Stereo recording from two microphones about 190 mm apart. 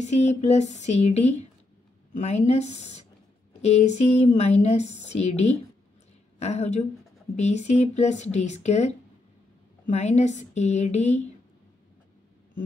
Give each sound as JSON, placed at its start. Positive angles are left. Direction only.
{"t": 0.0, "sound": "speech", "side_deg": 35}